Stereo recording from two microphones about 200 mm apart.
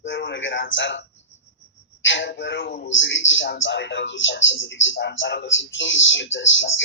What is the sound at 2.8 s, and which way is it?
Speech, 65° left (ahead or behind).